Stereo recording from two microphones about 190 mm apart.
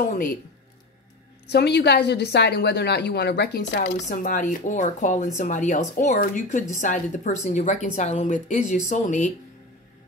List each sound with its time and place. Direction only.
1.5 s a woman's voice: 60° left (ahead or behind); by 9.3 s 40° left (ahead or behind)